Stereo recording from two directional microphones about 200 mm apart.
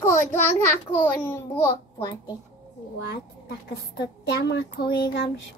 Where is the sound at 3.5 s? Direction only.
55° left (ahead or behind).